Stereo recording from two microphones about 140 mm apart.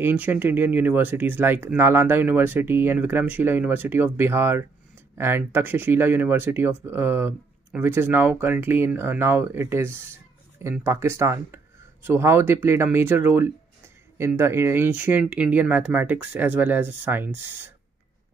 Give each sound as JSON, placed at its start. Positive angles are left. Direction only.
{"t": 0.0, "sound": "speech", "side_deg": -15}